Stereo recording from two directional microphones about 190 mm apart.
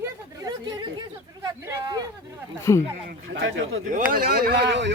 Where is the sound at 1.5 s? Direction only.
20° right (ahead or behind).